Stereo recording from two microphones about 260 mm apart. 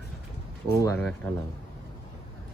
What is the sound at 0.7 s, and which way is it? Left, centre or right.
Speech, centre.